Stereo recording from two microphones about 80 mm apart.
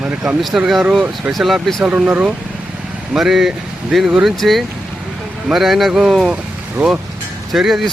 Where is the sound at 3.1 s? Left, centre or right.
Centre.